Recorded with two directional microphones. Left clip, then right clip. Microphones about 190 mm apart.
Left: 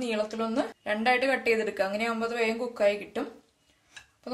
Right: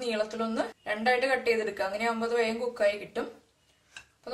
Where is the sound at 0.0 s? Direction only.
45° left (ahead or behind).